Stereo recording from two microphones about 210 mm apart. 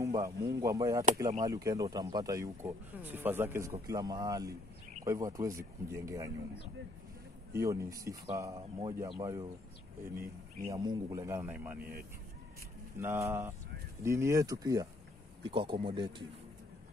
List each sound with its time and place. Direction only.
0.0 s speech: 15° right (ahead or behind)
7.5 s speech: 15° right (ahead or behind)
10.7 s speech: 20° right (ahead or behind)
11.8 s speech: 45° right (ahead or behind)
12.9 s speech: 10° right (ahead or behind)